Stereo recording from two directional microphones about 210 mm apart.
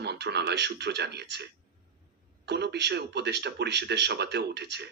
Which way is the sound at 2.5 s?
55° right (ahead or behind).